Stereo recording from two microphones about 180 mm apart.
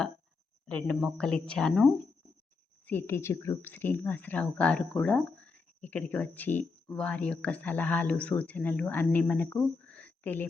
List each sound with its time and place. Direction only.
0.7 s speech: 5° left (ahead or behind)